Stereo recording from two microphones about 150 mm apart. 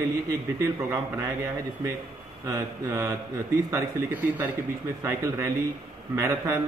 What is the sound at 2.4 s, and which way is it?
A man's voice, 20° right (ahead or behind).